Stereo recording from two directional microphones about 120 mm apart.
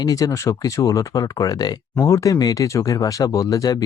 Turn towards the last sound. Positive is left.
turn(degrees=30)  # may be behind; listen again after turning